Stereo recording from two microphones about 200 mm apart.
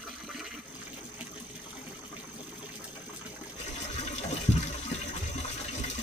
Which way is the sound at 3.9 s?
35° left (ahead or behind).